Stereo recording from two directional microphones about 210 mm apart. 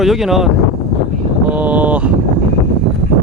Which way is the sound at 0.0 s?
Centre (ahead or behind).